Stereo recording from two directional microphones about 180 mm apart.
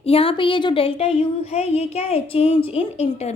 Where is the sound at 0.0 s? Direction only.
30° left (ahead or behind).